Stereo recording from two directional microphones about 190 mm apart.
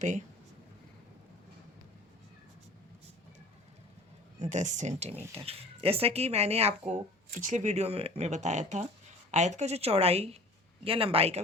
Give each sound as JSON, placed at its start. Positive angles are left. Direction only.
{"t": 0.0, "sound": "speech", "side_deg": -40}
{"t": 4.4, "sound": "speech", "side_deg": -40}